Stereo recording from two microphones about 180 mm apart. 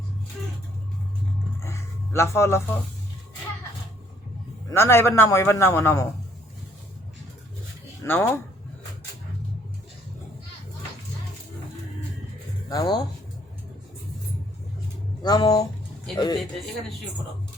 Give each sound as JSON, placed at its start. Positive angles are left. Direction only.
{"t": 1.6, "sound": "a sound", "side_deg": 15}
{"t": 4.7, "sound": "a man's voice", "side_deg": 15}
{"t": 8.0, "sound": "a man's voice", "side_deg": 10}
{"t": 12.6, "sound": "speech", "side_deg": 20}
{"t": 15.2, "sound": "speech", "side_deg": 20}